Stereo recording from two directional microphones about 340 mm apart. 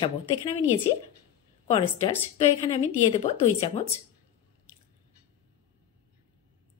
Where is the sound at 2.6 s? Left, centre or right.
Centre.